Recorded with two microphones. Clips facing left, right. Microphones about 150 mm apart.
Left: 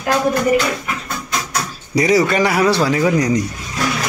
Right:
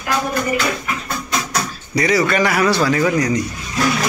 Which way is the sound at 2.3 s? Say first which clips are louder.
Left 1 dB; 30° left (ahead or behind).